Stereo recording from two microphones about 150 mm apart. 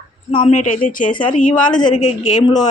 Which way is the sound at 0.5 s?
60° left (ahead or behind).